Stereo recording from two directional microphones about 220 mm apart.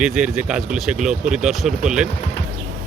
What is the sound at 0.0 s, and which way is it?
Speech, 5° right (ahead or behind).